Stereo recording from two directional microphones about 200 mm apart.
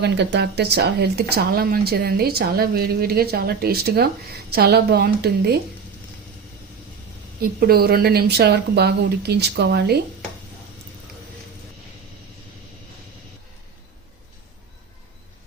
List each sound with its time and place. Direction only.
0.0 s speech: 60° right (ahead or behind)
7.4 s speech: 50° right (ahead or behind)